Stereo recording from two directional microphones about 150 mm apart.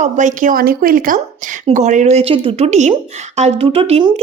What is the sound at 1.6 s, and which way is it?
A woman's voice, 50° right (ahead or behind).